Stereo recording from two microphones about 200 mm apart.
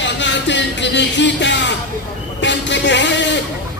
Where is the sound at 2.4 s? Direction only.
60° left (ahead or behind).